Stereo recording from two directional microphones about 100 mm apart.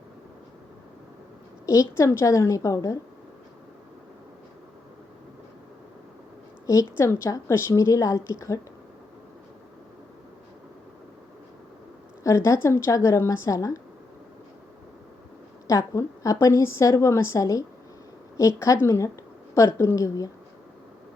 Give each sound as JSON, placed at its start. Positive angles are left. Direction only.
{"t": 1.6, "sound": "a woman's voice", "side_deg": 30}
{"t": 6.7, "sound": "a woman's voice", "side_deg": 30}
{"t": 12.2, "sound": "a woman's voice", "side_deg": 30}
{"t": 15.6, "sound": "a woman's voice", "side_deg": 30}